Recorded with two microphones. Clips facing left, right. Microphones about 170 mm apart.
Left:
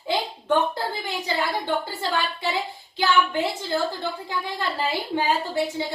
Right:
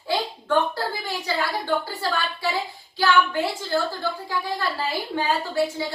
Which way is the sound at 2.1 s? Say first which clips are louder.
Left 1 dB; 20° left (ahead or behind).